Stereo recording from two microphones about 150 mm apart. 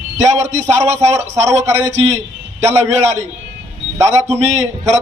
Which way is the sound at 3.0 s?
50° right (ahead or behind).